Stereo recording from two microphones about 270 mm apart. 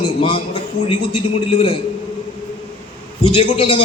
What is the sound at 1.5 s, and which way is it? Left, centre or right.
Speech, left.